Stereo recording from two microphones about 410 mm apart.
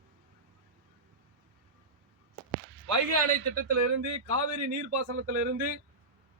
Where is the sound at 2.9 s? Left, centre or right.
Right.